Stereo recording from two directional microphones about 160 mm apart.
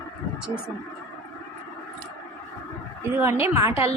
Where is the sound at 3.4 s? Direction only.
15° right (ahead or behind).